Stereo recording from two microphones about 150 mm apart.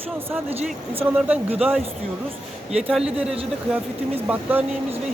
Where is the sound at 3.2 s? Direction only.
5° right (ahead or behind).